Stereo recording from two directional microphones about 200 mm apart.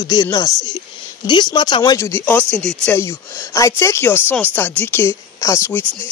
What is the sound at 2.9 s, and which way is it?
Speech, 15° left (ahead or behind).